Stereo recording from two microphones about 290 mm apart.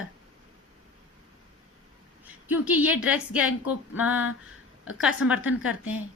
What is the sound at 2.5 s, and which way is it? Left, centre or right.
A woman's voice, centre.